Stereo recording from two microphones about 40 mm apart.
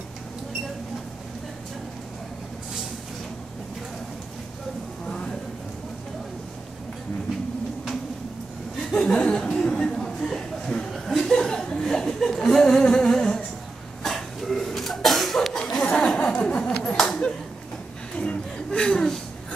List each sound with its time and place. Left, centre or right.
5.0 s a sound: centre
8.9 s chuckle: left
9.3 s cough: centre
10.9 s chuckle: centre
12.8 s humming: centre
14.0 s cough: centre
16.3 s a sound: left
16.9 s a sound: centre
18.1 s chuckle: left